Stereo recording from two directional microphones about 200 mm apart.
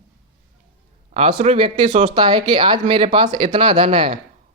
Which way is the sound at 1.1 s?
30° right (ahead or behind).